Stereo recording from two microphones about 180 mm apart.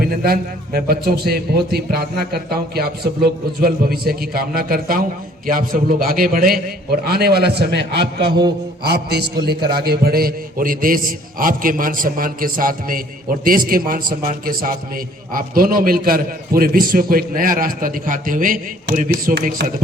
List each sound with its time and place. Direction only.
0.2 s a man's voice: 60° right (ahead or behind)
9.6 s a man's voice: 25° right (ahead or behind)
9.8 s a man's voice: 60° right (ahead or behind)